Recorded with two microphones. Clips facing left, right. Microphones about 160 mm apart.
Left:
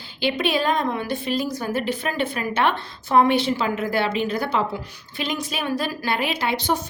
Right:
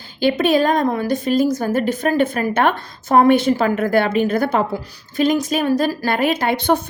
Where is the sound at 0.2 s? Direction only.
45° right (ahead or behind).